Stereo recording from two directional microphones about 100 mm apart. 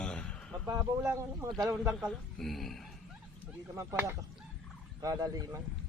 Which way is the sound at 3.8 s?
25° right (ahead or behind).